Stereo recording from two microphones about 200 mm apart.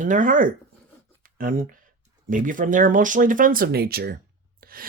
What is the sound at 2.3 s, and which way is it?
Speech, 40° right (ahead or behind).